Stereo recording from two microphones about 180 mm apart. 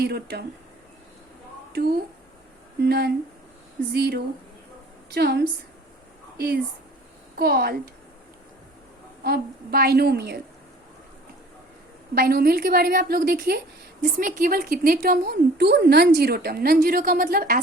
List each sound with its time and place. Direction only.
0.0 s a woman's voice: 65° right (ahead or behind)
2.8 s a woman's voice: 60° right (ahead or behind)
9.2 s a woman's voice: 60° right (ahead or behind)
12.1 s a woman's voice: 55° right (ahead or behind)